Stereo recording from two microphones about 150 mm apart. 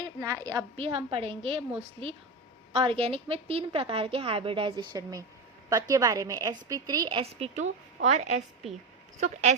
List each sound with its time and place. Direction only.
0.0 s speech: 25° right (ahead or behind)
0.8 s a woman's voice: 40° right (ahead or behind)
2.7 s a woman's voice: 40° right (ahead or behind)
7.2 s a woman's voice: 40° right (ahead or behind)